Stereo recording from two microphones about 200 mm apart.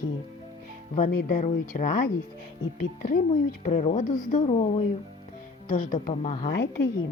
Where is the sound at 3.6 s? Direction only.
35° left (ahead or behind).